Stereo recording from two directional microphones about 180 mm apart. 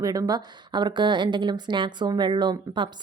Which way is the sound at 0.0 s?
20° right (ahead or behind).